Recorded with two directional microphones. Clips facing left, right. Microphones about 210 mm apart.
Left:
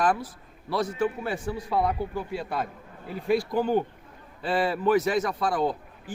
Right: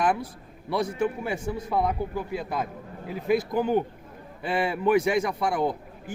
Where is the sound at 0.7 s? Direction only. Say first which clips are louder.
Even; 20° right (ahead or behind).